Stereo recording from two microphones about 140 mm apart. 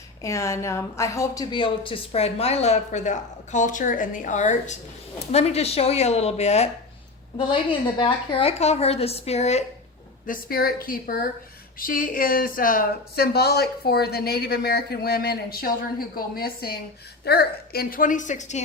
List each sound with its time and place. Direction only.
0.2 s a woman's voice: 20° left (ahead or behind); by 6.7 s 50° left (ahead or behind)
7.3 s a woman's voice: 35° left (ahead or behind)
10.2 s speech: 85° left
11.8 s a woman's voice: 80° left; by 18.6 s 55° left (ahead or behind)